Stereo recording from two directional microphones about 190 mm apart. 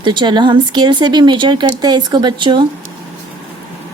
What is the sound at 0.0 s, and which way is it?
Speech, 25° right (ahead or behind).